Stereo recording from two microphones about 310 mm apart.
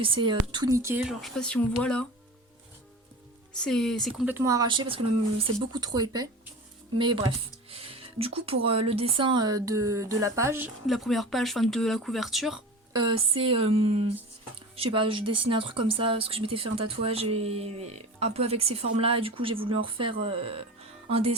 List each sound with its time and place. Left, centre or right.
0.0 s speech: centre
3.5 s a woman's voice: centre
12.9 s speech: centre